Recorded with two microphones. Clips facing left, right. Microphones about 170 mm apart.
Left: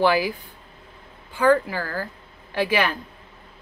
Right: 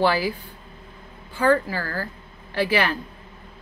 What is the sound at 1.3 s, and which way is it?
Speech, 15° left (ahead or behind).